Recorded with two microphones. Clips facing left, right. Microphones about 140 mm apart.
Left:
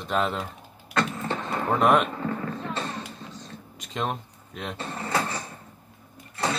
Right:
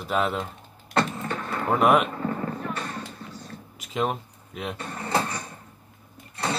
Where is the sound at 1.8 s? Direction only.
5° right (ahead or behind).